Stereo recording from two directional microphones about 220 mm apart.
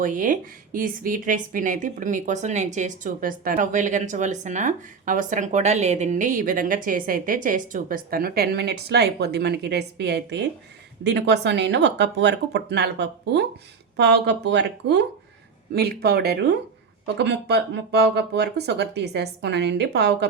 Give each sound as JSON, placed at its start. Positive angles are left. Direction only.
{"t": 0.0, "sound": "speech", "side_deg": -35}